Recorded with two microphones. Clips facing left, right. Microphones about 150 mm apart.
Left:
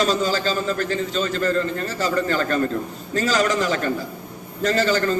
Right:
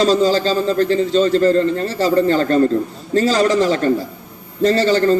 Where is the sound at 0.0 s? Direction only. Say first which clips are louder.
Right 6 dB; 30° right (ahead or behind).